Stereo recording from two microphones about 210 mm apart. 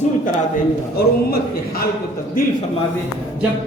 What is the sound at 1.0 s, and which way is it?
Speech, 45° left (ahead or behind).